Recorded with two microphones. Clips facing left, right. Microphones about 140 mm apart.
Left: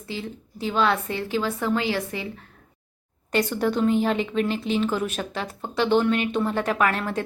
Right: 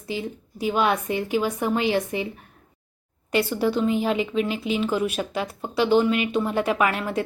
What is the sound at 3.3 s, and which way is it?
A woman's voice, 5° right (ahead or behind).